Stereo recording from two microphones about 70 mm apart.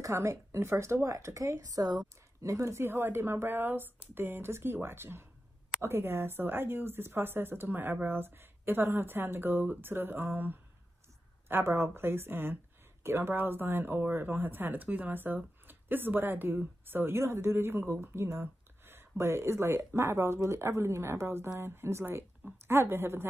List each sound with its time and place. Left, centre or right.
0.0 s speech: right
2.5 s a woman's voice: right